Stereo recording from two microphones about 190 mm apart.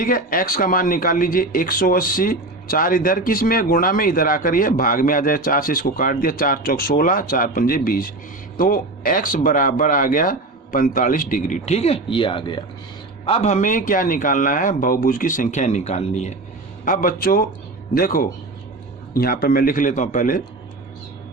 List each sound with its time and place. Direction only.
0.0 s speech: 50° left (ahead or behind)
16.8 s speech: 45° left (ahead or behind)